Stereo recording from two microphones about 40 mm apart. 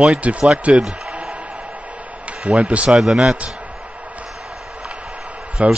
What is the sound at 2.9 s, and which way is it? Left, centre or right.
Speech, centre.